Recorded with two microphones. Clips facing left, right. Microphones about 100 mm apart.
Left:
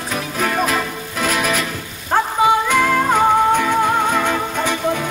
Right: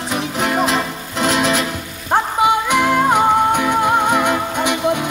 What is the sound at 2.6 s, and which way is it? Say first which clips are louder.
Music: right 1 dB; 15° right (ahead or behind).